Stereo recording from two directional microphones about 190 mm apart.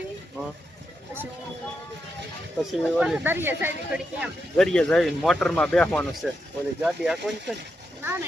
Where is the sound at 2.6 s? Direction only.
5° right (ahead or behind).